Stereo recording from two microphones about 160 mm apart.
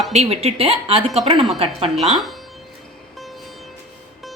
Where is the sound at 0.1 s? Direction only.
40° right (ahead or behind).